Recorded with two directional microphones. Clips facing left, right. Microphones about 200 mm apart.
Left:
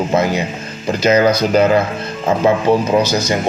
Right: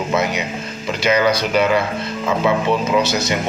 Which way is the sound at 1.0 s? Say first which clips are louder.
Left 4 dB; 45° left (ahead or behind).